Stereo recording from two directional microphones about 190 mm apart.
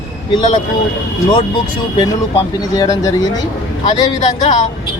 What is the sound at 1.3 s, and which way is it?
Speech, 25° left (ahead or behind).